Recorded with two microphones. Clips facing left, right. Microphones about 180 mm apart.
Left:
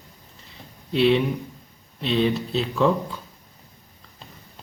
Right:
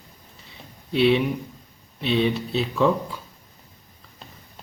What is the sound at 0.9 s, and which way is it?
Speech, centre (ahead or behind).